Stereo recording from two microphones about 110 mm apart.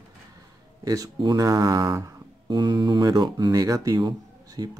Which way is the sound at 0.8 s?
35° right (ahead or behind).